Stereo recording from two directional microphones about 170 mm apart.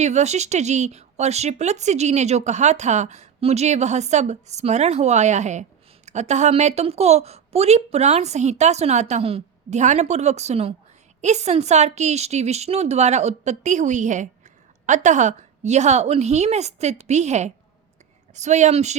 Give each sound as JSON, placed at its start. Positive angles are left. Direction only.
{"t": 0.0, "sound": "a woman's voice", "side_deg": -40}